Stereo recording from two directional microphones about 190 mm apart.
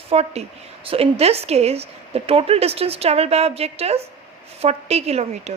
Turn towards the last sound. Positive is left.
turn(degrees=-35)  # may be behind; listen again after turning